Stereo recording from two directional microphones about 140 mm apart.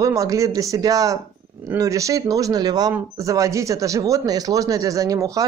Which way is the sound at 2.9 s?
20° right (ahead or behind).